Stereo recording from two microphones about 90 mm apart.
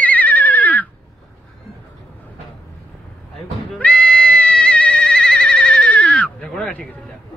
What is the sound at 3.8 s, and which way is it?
Goat, 15° left (ahead or behind).